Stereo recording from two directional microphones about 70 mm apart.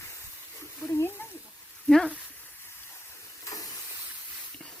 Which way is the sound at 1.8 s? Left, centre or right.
Centre.